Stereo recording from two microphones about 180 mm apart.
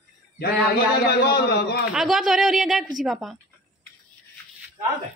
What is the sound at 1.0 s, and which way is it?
Speech, 65° left (ahead or behind).